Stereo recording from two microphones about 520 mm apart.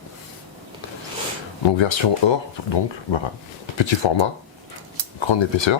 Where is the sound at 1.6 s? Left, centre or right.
Left.